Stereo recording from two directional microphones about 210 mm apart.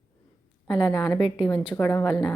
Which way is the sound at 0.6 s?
20° left (ahead or behind).